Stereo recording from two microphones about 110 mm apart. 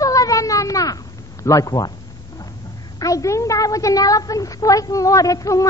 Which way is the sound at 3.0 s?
30° left (ahead or behind).